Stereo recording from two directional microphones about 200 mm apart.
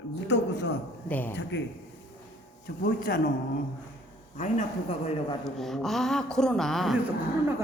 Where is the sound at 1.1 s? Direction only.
10° left (ahead or behind).